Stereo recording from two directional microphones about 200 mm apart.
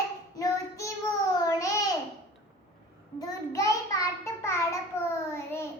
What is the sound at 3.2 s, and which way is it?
Child singing, 15° left (ahead or behind).